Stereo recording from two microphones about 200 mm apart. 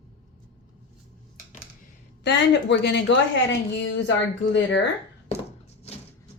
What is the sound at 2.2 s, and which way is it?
A woman's voice, 60° left (ahead or behind).